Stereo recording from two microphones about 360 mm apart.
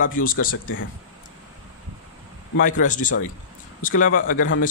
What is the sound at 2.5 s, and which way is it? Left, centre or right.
Speech, left.